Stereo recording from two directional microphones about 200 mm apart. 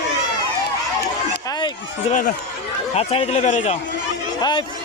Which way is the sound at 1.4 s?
20° left (ahead or behind).